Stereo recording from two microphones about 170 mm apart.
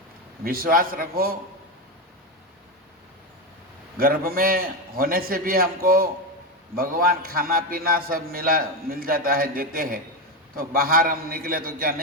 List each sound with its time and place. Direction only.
0.4 s a man's voice: 60° right (ahead or behind)
3.9 s a man's voice: 60° right (ahead or behind)